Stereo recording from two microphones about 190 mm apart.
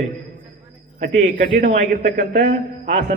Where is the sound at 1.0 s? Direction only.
40° right (ahead or behind).